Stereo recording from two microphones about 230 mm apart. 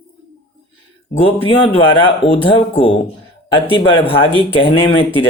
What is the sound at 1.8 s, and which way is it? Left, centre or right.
Speech, left.